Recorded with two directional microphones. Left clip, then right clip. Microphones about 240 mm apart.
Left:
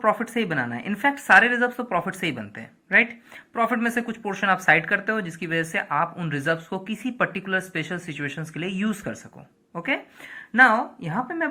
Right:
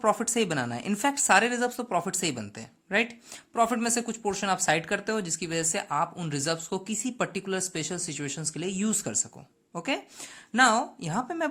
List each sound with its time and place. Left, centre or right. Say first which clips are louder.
0.0 s speech: left 3 dB; right